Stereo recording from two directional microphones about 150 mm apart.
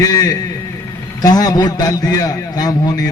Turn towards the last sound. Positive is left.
turn(degrees=25)  # may be behind; listen again after turning